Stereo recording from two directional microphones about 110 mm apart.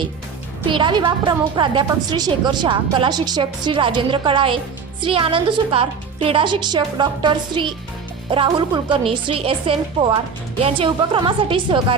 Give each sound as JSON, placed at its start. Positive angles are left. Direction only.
{"t": 0.6, "sound": "a woman's voice", "side_deg": -50}